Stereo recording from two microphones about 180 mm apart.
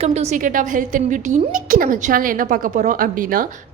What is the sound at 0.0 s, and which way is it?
A woman's voice, 35° right (ahead or behind).